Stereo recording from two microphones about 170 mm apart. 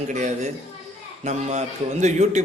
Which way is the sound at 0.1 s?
45° right (ahead or behind).